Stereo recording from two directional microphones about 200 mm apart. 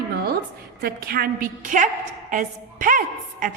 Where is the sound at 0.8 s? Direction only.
50° right (ahead or behind).